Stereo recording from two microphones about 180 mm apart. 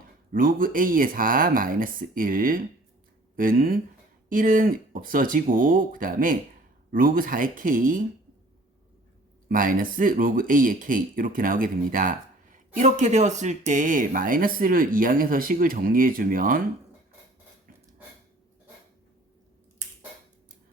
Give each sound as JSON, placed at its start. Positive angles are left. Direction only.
{"t": 0.3, "sound": "speech", "side_deg": -50}
{"t": 9.5, "sound": "speech", "side_deg": -50}